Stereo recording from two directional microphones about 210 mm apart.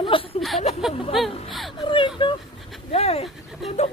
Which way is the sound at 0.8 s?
Centre (ahead or behind).